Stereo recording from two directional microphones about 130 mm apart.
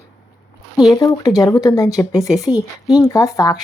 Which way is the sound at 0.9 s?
30° left (ahead or behind).